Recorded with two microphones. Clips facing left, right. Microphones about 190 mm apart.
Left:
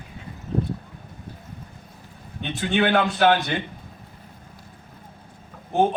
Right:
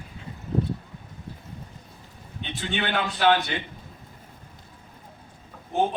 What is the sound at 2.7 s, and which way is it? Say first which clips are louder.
Speech: left 7 dB; 50° left (ahead or behind).